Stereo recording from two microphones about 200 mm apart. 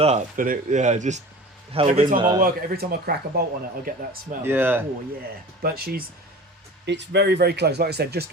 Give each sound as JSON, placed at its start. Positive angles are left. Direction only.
{"t": 0.0, "sound": "a man's voice", "side_deg": -40}
{"t": 2.4, "sound": "speech", "side_deg": -50}
{"t": 4.4, "sound": "speech", "side_deg": -10}
{"t": 5.6, "sound": "speech", "side_deg": -50}